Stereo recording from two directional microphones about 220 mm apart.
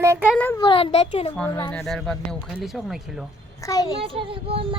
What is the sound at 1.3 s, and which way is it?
Speech, 10° left (ahead or behind).